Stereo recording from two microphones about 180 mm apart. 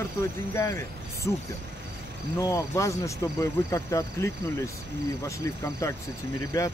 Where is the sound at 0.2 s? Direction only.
15° left (ahead or behind).